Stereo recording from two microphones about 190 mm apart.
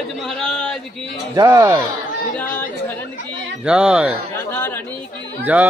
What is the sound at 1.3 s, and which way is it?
Speech, 15° right (ahead or behind).